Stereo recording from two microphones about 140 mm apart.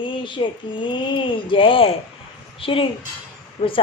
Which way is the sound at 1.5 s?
40° left (ahead or behind).